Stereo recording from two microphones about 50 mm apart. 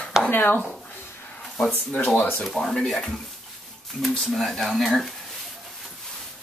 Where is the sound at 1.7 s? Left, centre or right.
Left.